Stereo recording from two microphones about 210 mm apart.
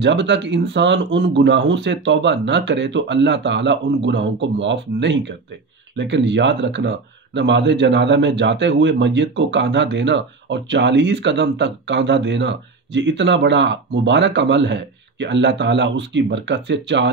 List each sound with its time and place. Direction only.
0.0 s speech: 55° right (ahead or behind)